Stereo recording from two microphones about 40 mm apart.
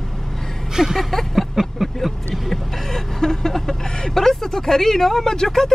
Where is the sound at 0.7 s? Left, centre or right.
Centre.